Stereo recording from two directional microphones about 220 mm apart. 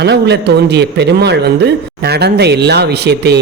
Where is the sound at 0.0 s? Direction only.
50° right (ahead or behind).